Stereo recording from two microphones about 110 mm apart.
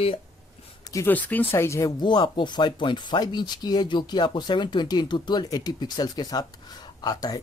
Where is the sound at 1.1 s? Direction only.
15° left (ahead or behind).